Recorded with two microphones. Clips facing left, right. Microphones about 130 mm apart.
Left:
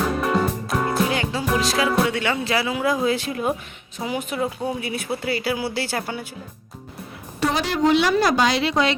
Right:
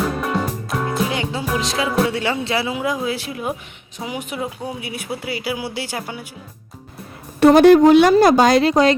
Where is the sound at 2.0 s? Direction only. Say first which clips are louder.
Right 2 dB; 30° right (ahead or behind).